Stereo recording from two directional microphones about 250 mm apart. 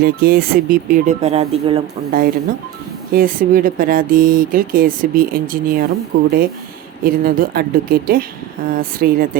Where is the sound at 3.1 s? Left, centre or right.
Right.